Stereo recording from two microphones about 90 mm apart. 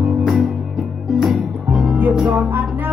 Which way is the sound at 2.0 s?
20° right (ahead or behind).